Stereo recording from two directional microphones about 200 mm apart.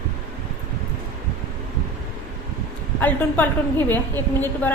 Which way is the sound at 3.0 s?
10° left (ahead or behind).